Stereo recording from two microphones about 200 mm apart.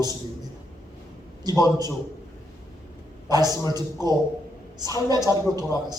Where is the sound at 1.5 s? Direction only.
20° right (ahead or behind).